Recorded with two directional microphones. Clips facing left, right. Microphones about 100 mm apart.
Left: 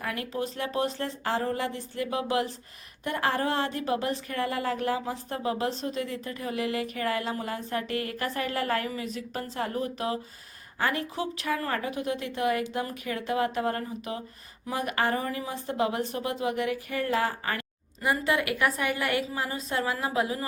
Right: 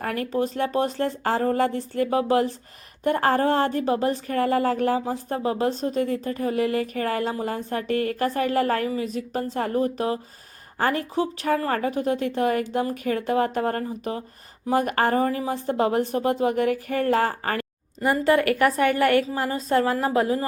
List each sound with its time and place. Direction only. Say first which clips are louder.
0.0 s a woman's voice: right 7 dB; 45° right (ahead or behind)